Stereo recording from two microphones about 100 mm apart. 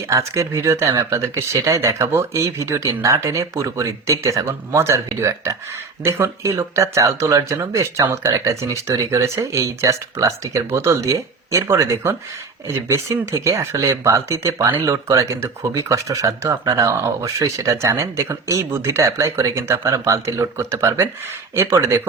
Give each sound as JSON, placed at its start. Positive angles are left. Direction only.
{"t": 0.1, "sound": "speech", "side_deg": -30}